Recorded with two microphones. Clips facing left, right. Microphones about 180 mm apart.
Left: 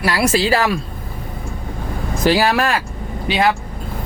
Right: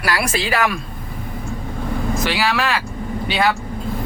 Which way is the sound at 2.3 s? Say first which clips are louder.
Left 7 dB; 40° left (ahead or behind).